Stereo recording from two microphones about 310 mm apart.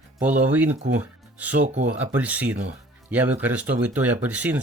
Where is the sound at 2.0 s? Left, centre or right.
Centre.